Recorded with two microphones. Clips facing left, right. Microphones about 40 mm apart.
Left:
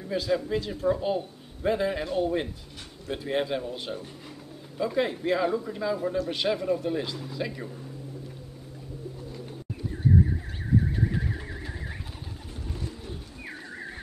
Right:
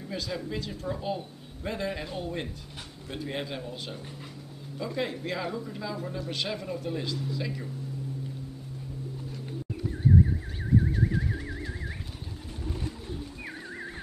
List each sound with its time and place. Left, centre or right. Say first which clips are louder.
0.1 s speech: left 8 dB; centre